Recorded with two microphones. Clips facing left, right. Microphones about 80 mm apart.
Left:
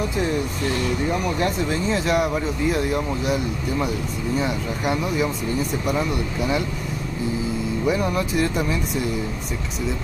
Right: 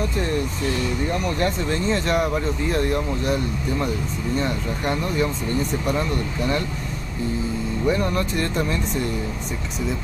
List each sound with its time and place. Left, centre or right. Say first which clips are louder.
1.1 s speech: left 1 dB; centre
7.8 s speech: right 1 dB; centre